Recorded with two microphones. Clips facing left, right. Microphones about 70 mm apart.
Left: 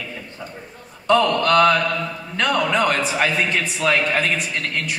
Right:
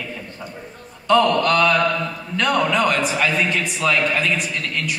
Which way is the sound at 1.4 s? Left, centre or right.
Left.